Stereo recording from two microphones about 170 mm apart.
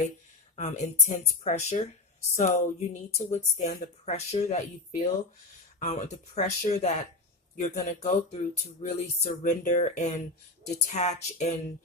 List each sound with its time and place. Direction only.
0.5 s speech: 45° left (ahead or behind)